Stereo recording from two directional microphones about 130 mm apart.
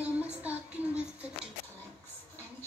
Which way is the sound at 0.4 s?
10° right (ahead or behind).